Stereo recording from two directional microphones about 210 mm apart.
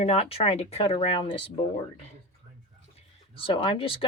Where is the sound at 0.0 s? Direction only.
30° left (ahead or behind).